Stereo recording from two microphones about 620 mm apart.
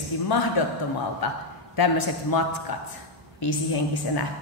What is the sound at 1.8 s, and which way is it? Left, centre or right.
Speech, left.